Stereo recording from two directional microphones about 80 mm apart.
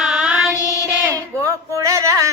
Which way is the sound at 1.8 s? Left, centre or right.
Right.